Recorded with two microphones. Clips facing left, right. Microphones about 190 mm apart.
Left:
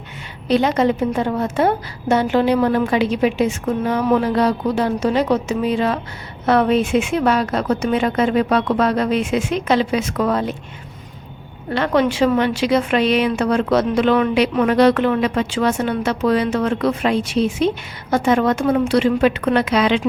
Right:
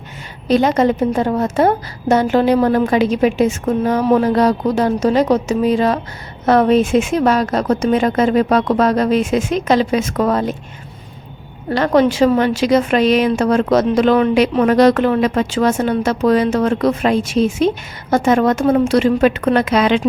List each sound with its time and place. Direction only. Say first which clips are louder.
0.4 s a woman's voice: right 3 dB; 45° right (ahead or behind)
11.7 s a woman's voice: right 4 dB; 40° right (ahead or behind)